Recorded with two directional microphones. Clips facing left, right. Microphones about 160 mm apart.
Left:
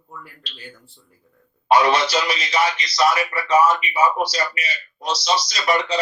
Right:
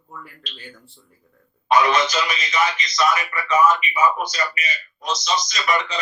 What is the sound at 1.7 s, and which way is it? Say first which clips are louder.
A man's voice: left 1 dB; 30° left (ahead or behind).